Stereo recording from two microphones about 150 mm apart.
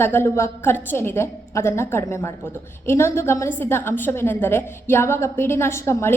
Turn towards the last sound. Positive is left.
turn(degrees=15)  # may be behind; listen again after turning